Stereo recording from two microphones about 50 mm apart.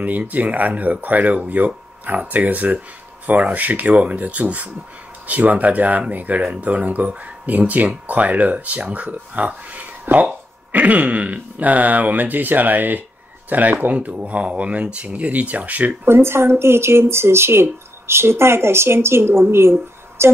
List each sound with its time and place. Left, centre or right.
0.0 s speech: right
10.1 s speech: right
10.7 s speech: right
16.1 s speech: right